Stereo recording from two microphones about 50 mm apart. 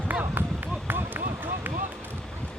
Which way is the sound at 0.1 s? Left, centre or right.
Right.